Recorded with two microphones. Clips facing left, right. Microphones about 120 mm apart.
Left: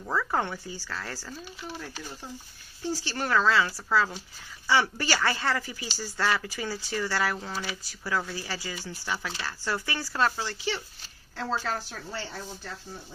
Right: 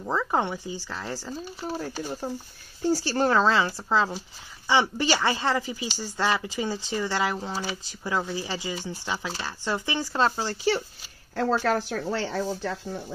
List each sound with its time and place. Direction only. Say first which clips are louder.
0.0 s speech: right 3 dB; 20° right (ahead or behind)
1.3 s speech: right 7 dB; 40° right (ahead or behind); by 7.3 s 20° right (ahead or behind)
7.3 s speech: right 4 dB; 30° right (ahead or behind)
11.3 s speech: right 7 dB; 55° right (ahead or behind); by 13.0 s 90° right